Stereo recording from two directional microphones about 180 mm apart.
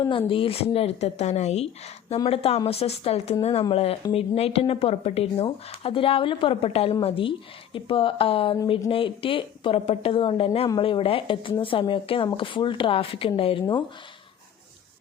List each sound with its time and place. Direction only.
0.0 s a woman's voice: 30° left (ahead or behind)